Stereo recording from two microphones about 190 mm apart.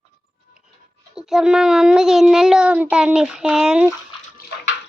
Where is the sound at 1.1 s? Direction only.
5° right (ahead or behind).